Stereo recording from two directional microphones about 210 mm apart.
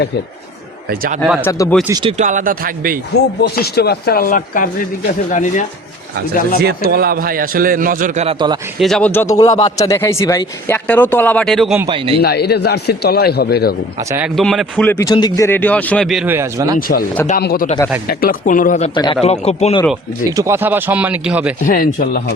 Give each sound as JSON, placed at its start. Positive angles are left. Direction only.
{"t": 0.9, "sound": "a man's voice", "side_deg": -45}
{"t": 1.2, "sound": "speech", "side_deg": -5}
{"t": 1.5, "sound": "a man's voice", "side_deg": 15}
{"t": 1.9, "sound": "a man's voice", "side_deg": -20}
{"t": 2.1, "sound": "speech", "side_deg": -35}
{"t": 3.4, "sound": "a man's voice", "side_deg": 50}
{"t": 6.6, "sound": "a man's voice", "side_deg": -45}
{"t": 8.8, "sound": "a man's voice", "side_deg": 5}
{"t": 11.9, "sound": "a man's voice", "side_deg": -25}
{"t": 12.2, "sound": "a man's voice", "side_deg": 50}
{"t": 14.3, "sound": "a man's voice", "side_deg": 0}
{"t": 17.4, "sound": "a man's voice", "side_deg": 45}
{"t": 20.3, "sound": "speech", "side_deg": -15}
{"t": 21.6, "sound": "a man's voice", "side_deg": 40}